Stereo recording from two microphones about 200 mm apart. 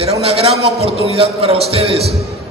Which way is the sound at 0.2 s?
30° right (ahead or behind).